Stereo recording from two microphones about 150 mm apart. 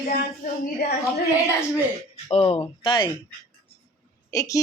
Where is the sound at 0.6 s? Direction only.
90° left.